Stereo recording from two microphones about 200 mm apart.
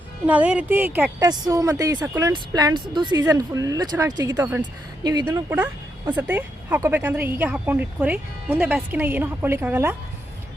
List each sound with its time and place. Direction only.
0.3 s speech: 5° right (ahead or behind)